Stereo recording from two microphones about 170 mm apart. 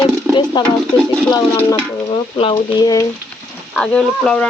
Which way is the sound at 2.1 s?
30° left (ahead or behind).